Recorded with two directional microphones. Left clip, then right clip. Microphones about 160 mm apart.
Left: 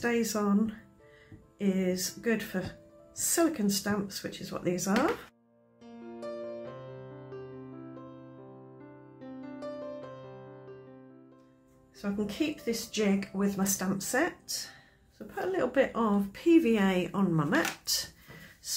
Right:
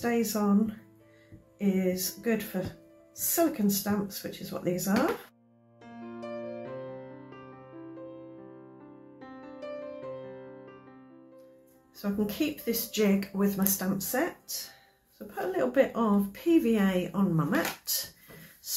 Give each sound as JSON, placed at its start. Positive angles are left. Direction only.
{"t": 0.0, "sound": "a woman's voice", "side_deg": 25}
{"t": 12.0, "sound": "a woman's voice", "side_deg": 10}
{"t": 17.2, "sound": "speech", "side_deg": 35}